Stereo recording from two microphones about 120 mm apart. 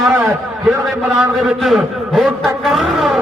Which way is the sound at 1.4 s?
Centre (ahead or behind).